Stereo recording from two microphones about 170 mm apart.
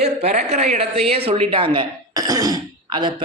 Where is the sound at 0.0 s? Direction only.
40° right (ahead or behind).